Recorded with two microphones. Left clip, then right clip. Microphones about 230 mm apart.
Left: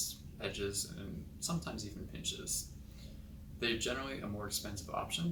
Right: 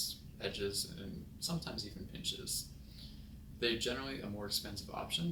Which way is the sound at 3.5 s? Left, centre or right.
Centre.